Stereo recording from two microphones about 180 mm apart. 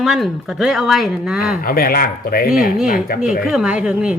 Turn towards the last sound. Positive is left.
turn(degrees=-5)  # may be behind; listen again after turning